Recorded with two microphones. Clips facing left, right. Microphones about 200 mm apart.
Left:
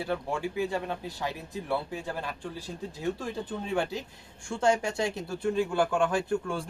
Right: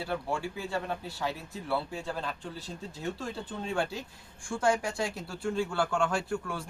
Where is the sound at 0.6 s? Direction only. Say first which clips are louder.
Left 3 dB; 15° left (ahead or behind).